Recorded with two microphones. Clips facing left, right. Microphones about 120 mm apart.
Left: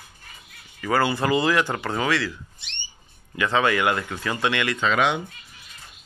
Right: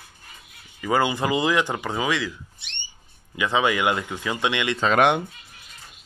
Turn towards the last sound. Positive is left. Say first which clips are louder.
# right 4 dB
turn(degrees=-55)  # may be behind; listen again after turning